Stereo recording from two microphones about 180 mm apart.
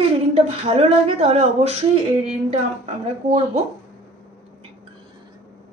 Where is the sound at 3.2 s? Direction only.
35° right (ahead or behind).